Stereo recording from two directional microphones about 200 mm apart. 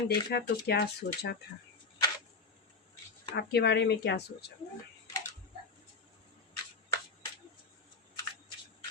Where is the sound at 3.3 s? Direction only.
55° left (ahead or behind).